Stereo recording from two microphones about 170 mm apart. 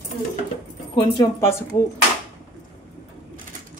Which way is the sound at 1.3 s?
15° left (ahead or behind).